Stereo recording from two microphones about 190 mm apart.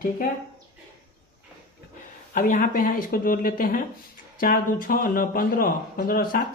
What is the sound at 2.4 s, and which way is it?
Speech, 45° left (ahead or behind).